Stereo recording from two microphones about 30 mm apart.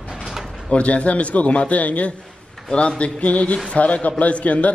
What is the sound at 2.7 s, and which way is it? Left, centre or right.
A man's voice, left.